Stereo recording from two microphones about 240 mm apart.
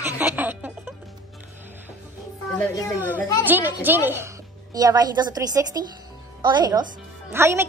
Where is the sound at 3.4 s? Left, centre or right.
Centre.